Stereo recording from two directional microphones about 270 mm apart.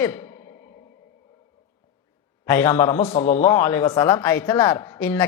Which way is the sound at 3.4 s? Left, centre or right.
Centre.